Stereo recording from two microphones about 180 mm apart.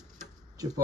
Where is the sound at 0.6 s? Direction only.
20° right (ahead or behind).